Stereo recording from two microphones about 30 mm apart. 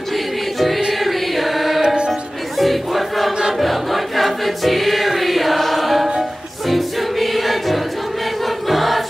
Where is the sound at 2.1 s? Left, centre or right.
Centre.